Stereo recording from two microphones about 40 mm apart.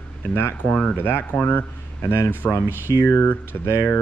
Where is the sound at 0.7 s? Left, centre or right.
Left.